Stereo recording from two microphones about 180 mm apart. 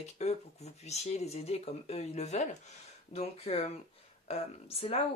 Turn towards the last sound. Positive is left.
turn(degrees=35)  # may be behind; listen again after turning